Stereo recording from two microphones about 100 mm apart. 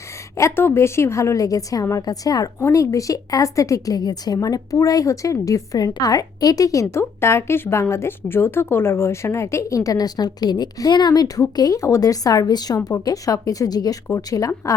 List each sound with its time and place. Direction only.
0.3 s a woman's voice: 25° left (ahead or behind)
2.6 s a woman's voice: 25° left (ahead or behind)